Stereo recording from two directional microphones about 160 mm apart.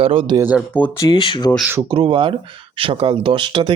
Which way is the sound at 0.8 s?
30° left (ahead or behind).